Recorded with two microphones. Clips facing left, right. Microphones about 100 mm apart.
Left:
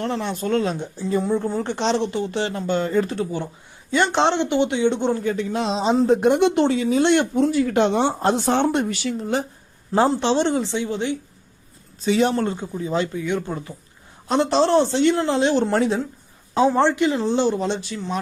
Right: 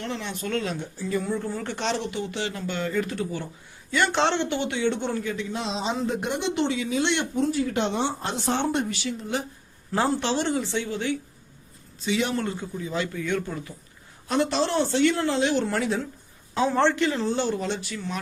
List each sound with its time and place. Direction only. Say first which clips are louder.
0.0 s speech: left 7 dB; 40° left (ahead or behind); by 5.2 s 20° left (ahead or behind)
5.2 s speech: left 7 dB; 40° left (ahead or behind)
6.3 s speech: left 8 dB; 50° left (ahead or behind)
7.3 s speech: left 6 dB; 75° left (ahead or behind); by 8.0 s 60° left (ahead or behind)
8.0 s speech: left 8 dB; 45° left (ahead or behind)
8.4 s speech: left 5 dB; 70° left (ahead or behind)
9.9 s speech: left 6 dB; 25° left (ahead or behind)
12.0 s speech: left 7 dB; 40° left (ahead or behind)
13.1 s a woman's voice: left 3 dB; 15° left (ahead or behind)
14.3 s a woman's voice: left 6 dB; 25° left (ahead or behind)